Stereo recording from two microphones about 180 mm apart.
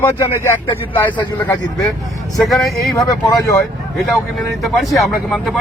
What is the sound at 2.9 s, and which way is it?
Speech, 20° left (ahead or behind).